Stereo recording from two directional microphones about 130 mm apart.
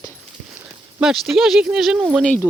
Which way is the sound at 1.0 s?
5° right (ahead or behind).